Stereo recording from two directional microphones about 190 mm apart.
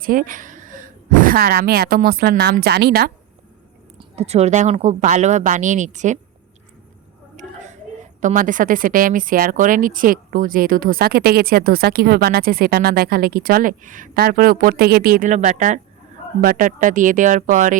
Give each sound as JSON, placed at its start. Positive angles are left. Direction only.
{"t": 0.0, "sound": "speech", "side_deg": -45}
{"t": 4.1, "sound": "a woman's voice", "side_deg": -35}
{"t": 7.3, "sound": "a sound", "side_deg": -40}
{"t": 8.2, "sound": "speech", "side_deg": -45}